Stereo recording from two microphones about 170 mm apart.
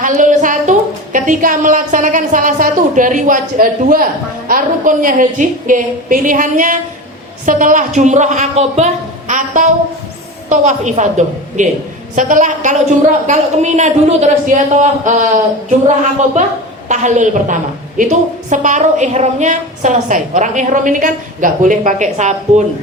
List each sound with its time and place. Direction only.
0.0 s a woman's voice: 50° right (ahead or behind)
16.4 s a woman's voice: 45° right (ahead or behind)